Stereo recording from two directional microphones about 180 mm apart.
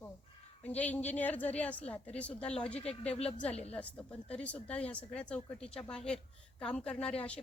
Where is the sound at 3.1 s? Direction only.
35° left (ahead or behind).